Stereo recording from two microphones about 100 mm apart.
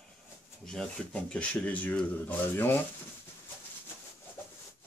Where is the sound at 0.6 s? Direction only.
5° left (ahead or behind).